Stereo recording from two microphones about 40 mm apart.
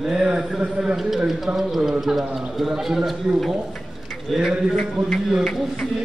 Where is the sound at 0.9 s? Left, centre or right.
Centre.